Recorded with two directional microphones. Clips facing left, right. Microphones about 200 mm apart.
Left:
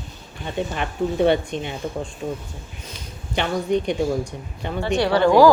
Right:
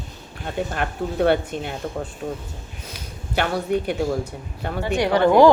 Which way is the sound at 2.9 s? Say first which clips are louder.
Right 2 dB; 10° right (ahead or behind).